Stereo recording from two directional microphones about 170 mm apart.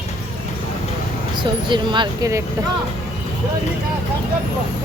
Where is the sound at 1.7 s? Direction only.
30° right (ahead or behind).